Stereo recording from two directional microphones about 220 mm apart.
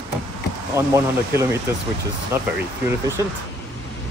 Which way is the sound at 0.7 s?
15° right (ahead or behind).